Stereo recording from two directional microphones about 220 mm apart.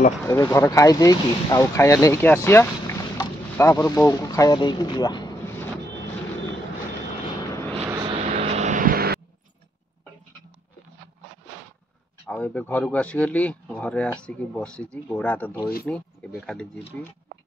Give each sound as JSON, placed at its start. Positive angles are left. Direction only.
{"t": 0.2, "sound": "speech", "side_deg": 10}
{"t": 7.9, "sound": "vehicle", "side_deg": -20}
{"t": 12.3, "sound": "speech", "side_deg": 5}